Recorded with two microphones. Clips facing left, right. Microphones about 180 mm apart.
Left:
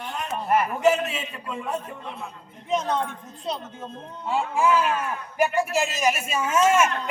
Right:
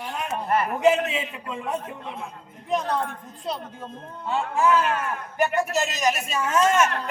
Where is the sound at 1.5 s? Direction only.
15° right (ahead or behind).